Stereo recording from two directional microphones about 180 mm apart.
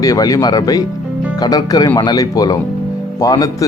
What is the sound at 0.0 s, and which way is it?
Speech, 20° left (ahead or behind).